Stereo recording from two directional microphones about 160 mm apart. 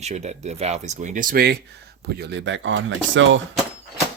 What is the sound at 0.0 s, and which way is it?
Speech, 45° right (ahead or behind).